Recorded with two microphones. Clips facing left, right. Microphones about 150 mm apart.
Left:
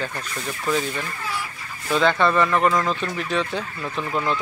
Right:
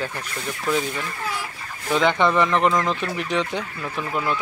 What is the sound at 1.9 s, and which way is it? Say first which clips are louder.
Speech: even; 15° right (ahead or behind).